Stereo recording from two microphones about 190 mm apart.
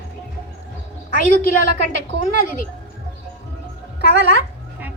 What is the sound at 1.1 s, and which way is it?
A woman's voice, 45° left (ahead or behind).